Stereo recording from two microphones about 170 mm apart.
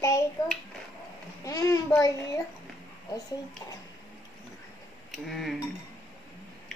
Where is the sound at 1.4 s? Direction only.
20° left (ahead or behind).